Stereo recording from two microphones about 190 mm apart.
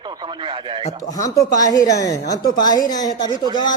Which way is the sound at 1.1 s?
20° left (ahead or behind).